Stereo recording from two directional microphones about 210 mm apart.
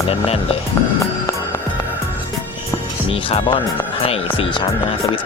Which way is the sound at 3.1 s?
25° left (ahead or behind).